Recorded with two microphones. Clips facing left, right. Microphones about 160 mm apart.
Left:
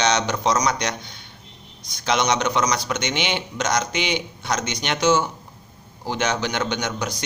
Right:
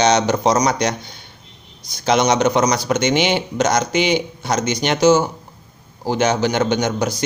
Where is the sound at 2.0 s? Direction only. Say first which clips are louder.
Right 6 dB; 45° right (ahead or behind).